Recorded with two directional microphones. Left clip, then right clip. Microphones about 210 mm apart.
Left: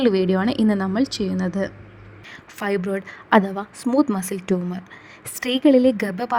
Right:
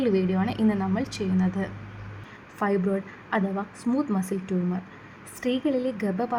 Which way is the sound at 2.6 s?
55° left (ahead or behind).